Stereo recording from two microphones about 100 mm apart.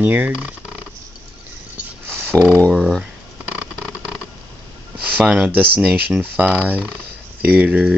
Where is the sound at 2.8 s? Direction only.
5° right (ahead or behind).